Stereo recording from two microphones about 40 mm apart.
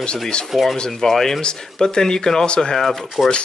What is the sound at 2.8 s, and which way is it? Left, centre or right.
Speech, centre.